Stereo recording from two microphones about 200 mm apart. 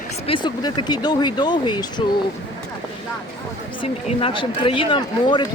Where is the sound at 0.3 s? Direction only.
25° left (ahead or behind).